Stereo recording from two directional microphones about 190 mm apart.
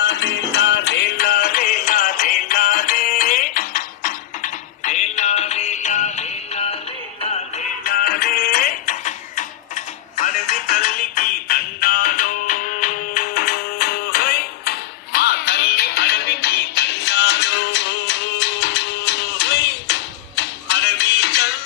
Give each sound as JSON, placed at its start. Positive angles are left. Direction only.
{"t": 0.0, "sound": "music", "side_deg": 65}
{"t": 7.8, "sound": "music", "side_deg": 50}